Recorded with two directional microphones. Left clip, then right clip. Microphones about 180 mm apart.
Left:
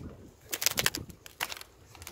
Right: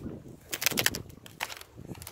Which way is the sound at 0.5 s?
10° right (ahead or behind).